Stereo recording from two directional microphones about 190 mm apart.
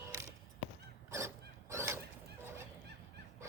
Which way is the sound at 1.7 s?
15° right (ahead or behind).